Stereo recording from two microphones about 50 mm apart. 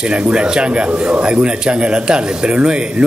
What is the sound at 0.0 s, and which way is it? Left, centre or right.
Speech, centre.